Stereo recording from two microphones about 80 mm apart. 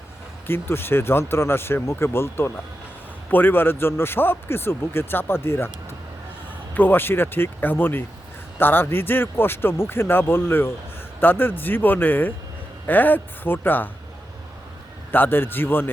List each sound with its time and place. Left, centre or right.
0.4 s a man's voice: left
6.7 s a man's voice: left
15.1 s a man's voice: left